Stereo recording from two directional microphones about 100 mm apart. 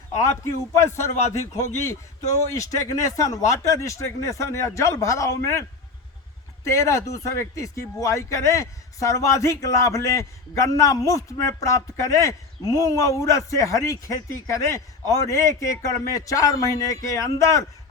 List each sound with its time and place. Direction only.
0.9 s a man's voice: 25° left (ahead or behind)
6.7 s speech: 30° left (ahead or behind)